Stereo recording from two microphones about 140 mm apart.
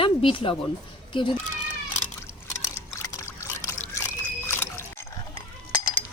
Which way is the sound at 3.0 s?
20° left (ahead or behind).